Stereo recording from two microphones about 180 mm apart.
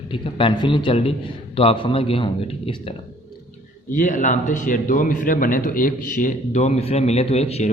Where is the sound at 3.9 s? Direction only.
45° left (ahead or behind).